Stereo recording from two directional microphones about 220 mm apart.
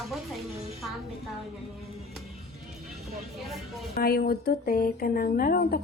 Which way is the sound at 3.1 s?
Centre (ahead or behind).